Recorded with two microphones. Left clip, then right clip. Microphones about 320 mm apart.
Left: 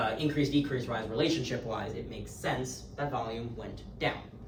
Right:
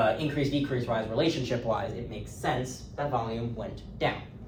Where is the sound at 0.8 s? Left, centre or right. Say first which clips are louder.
Right 4 dB; centre.